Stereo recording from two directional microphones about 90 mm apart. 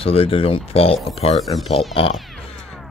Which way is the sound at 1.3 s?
Centre (ahead or behind).